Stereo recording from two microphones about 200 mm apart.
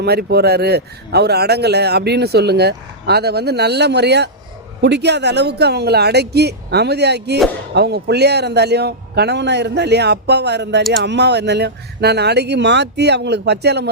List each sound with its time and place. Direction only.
0.0 s speech: 55° right (ahead or behind)